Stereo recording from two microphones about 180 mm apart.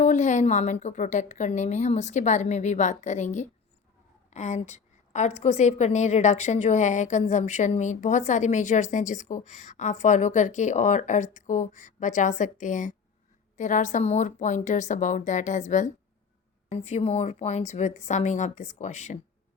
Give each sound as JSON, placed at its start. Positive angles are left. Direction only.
{"t": 0.0, "sound": "a woman's voice", "side_deg": 40}